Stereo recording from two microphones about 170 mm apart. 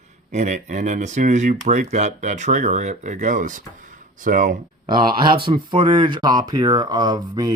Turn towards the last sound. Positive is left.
turn(degrees=-25)  # may be behind; listen again after turning